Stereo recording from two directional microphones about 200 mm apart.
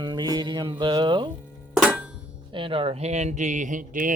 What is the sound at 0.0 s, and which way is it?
Speech, 20° right (ahead or behind).